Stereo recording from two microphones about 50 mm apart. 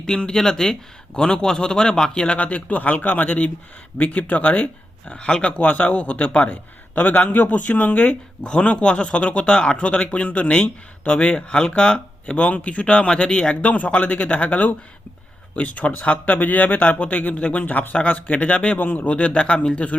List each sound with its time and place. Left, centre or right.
0.0 s a man's voice: centre
18.8 s speech: left
19.1 s speech: left